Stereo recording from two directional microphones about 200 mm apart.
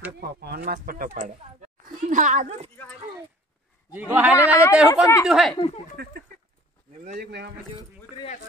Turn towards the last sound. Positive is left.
turn(degrees=-55)  # may be behind; listen again after turning